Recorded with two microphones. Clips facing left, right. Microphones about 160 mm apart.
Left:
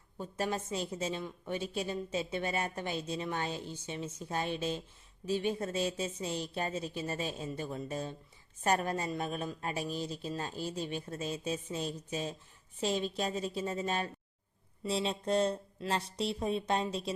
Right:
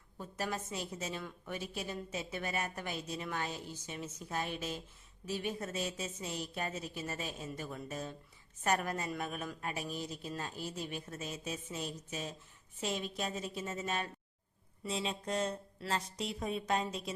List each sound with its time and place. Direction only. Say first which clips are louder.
0.2 s a woman's voice: left 4 dB; 30° left (ahead or behind)